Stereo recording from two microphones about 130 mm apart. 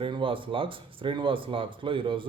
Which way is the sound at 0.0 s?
40° right (ahead or behind).